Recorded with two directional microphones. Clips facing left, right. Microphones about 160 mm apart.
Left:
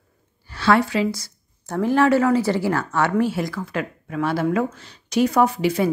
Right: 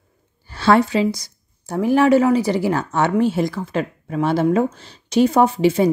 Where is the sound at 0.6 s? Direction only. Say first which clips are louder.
Right 3 dB; 25° right (ahead or behind).